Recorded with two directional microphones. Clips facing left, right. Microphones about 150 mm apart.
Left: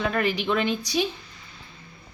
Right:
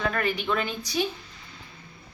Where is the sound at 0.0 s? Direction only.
20° left (ahead or behind).